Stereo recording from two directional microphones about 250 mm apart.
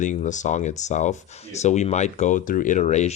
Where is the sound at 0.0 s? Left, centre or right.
Left.